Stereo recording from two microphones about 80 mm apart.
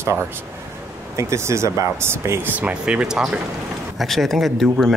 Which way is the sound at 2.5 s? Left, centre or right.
Centre.